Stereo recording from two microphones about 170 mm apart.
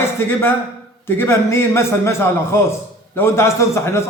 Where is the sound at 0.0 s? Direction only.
15° left (ahead or behind).